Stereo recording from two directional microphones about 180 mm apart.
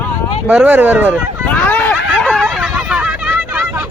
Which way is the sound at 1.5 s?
10° left (ahead or behind).